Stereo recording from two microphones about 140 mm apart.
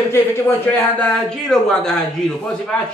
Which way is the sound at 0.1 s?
20° left (ahead or behind).